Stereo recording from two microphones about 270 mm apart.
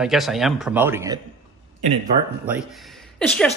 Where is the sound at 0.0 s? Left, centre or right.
Centre.